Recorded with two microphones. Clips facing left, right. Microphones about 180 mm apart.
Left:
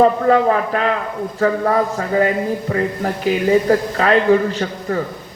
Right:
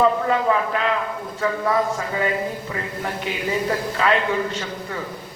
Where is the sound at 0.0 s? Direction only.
45° left (ahead or behind).